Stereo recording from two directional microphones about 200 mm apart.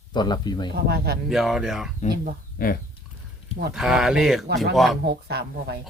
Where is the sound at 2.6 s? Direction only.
45° left (ahead or behind).